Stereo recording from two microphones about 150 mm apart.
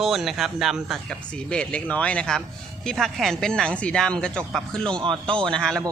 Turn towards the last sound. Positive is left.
turn(degrees=5)  # may be behind; listen again after turning